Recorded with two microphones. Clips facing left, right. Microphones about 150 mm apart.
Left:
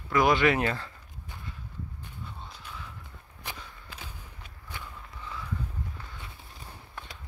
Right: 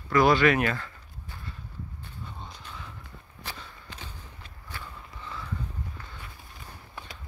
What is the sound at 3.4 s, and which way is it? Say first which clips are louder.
Walk: even; 10° left (ahead or behind).